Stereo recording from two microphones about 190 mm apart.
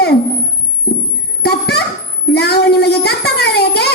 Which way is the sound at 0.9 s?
55° left (ahead or behind).